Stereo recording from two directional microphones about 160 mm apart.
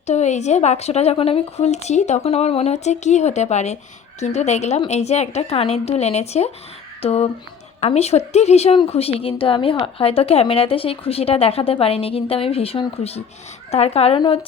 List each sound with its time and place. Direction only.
0.0 s speech: 45° left (ahead or behind)